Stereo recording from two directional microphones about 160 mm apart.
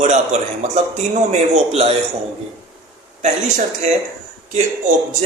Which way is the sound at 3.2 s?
45° right (ahead or behind).